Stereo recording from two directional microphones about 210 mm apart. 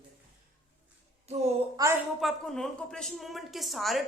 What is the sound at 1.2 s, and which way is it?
Speech, 30° right (ahead or behind).